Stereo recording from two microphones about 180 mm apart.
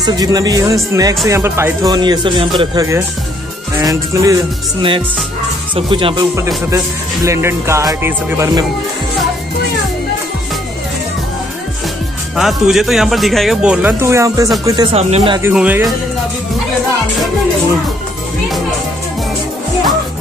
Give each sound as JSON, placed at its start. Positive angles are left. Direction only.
{"t": 0.0, "sound": "speech", "side_deg": -20}
{"t": 3.8, "sound": "music", "side_deg": -15}
{"t": 5.8, "sound": "speech", "side_deg": -30}
{"t": 6.3, "sound": "music", "side_deg": -15}
{"t": 12.4, "sound": "speech", "side_deg": 0}
{"t": 14.9, "sound": "speech", "side_deg": -35}
{"t": 15.5, "sound": "speech", "side_deg": -5}